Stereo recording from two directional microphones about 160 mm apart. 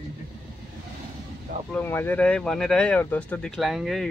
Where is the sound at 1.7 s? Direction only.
10° left (ahead or behind).